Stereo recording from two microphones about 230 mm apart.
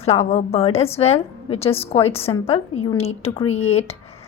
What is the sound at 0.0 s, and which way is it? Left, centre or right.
A woman's voice, left.